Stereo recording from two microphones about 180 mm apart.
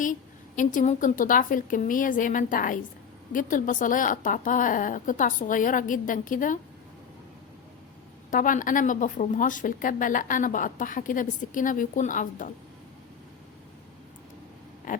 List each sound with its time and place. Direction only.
0.0 s speech: 45° left (ahead or behind)
8.3 s speech: 50° left (ahead or behind)
14.9 s a sound: 45° left (ahead or behind)